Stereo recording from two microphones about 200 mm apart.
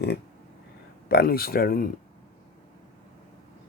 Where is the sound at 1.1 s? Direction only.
50° left (ahead or behind).